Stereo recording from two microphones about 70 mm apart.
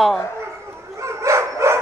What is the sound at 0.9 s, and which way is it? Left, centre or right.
Dog, right.